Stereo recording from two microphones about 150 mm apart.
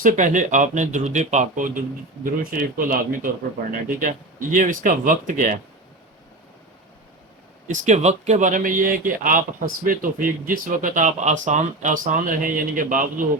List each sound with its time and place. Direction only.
0.0 s speech: 60° right (ahead or behind)
2.2 s speech: 75° right (ahead or behind)
4.5 s speech: 60° right (ahead or behind)
7.7 s speech: 55° right (ahead or behind)